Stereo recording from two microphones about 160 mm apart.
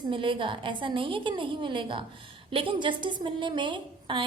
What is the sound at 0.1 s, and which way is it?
A woman's voice, 30° right (ahead or behind).